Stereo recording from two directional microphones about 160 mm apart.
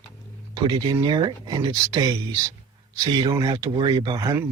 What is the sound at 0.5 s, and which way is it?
Speech, 25° right (ahead or behind).